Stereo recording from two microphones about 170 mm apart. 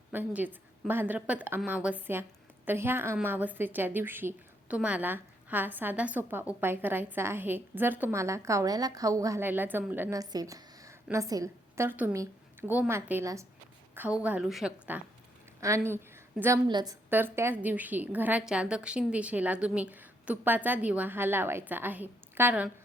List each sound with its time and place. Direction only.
0.1 s a woman's voice: 10° right (ahead or behind)
17.1 s a woman's voice: 10° right (ahead or behind)